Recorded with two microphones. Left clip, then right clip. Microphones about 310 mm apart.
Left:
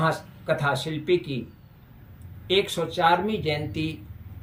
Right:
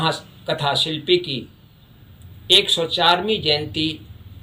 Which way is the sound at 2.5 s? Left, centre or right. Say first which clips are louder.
Right 8 dB; centre.